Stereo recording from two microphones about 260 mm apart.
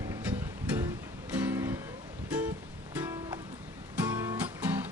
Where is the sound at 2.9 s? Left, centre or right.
Centre.